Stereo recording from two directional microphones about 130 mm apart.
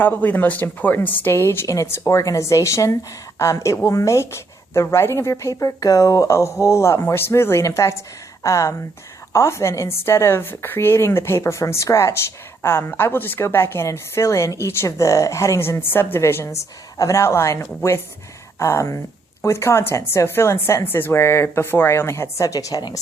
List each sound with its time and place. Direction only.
0.0 s a woman's voice: 15° left (ahead or behind); by 23.0 s 30° left (ahead or behind)